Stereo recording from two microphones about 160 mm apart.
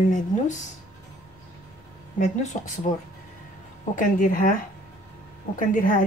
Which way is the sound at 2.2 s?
50° left (ahead or behind).